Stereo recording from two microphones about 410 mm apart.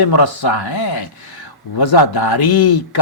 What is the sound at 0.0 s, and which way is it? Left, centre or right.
A man's voice, left.